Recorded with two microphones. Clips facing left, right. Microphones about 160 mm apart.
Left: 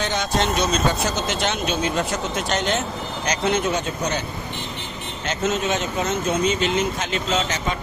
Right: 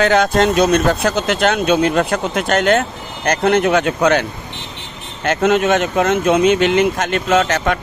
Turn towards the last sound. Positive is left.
turn(degrees=-60)  # may be behind; listen again after turning